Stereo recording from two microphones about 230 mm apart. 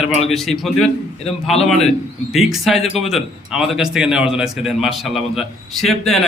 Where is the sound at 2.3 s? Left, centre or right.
Centre.